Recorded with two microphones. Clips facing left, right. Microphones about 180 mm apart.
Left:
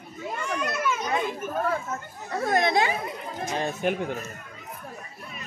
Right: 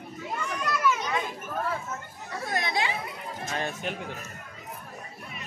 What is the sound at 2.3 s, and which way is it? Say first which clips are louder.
Speech: left 7 dB; 50° left (ahead or behind).